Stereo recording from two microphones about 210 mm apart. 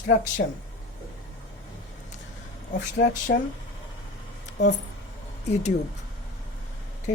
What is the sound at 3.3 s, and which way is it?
Speech, 50° left (ahead or behind).